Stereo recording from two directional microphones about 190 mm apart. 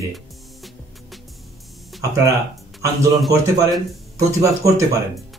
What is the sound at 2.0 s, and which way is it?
A man's voice, 15° right (ahead or behind).